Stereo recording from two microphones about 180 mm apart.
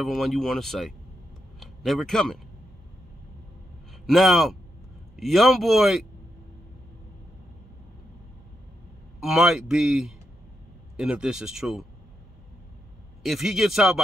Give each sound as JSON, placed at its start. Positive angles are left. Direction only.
{"t": 0.0, "sound": "speech", "side_deg": 0}
{"t": 4.0, "sound": "speech", "side_deg": 0}
{"t": 9.2, "sound": "speech", "side_deg": 0}
{"t": 13.2, "sound": "speech", "side_deg": 0}